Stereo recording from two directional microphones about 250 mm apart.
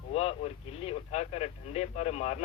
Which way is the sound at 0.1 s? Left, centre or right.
Left.